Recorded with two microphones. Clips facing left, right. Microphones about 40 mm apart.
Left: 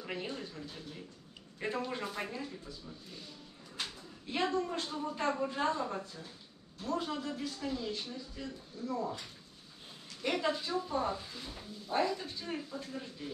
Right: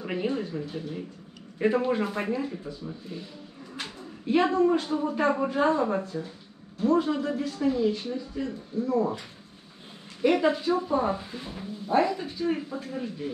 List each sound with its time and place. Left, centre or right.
0.0 s speech: right
3.7 s pigeon: right
4.7 s speech: right
7.0 s speech: centre; by 9.2 s right
10.3 s speech: right